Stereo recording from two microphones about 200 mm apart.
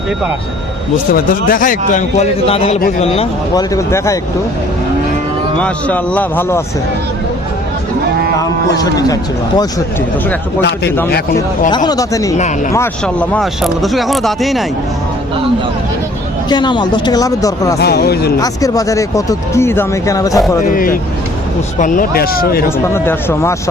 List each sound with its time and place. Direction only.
1.1 s speech: 45° left (ahead or behind)
3.5 s speech: 15° left (ahead or behind)
5.5 s speech: 5° left (ahead or behind)
8.8 s speech: 20° left (ahead or behind)
10.6 s a man's voice: 60° left (ahead or behind)
11.9 s speech: 15° left (ahead or behind); by 14.6 s centre (ahead or behind)
16.5 s speech: 20° left (ahead or behind)
17.7 s speech: 55° left (ahead or behind)
18.3 s speech: 20° left (ahead or behind)
20.7 s speech: 45° left (ahead or behind)
23.0 s speech: 15° left (ahead or behind)